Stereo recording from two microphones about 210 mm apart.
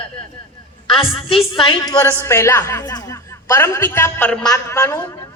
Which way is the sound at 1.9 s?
15° left (ahead or behind).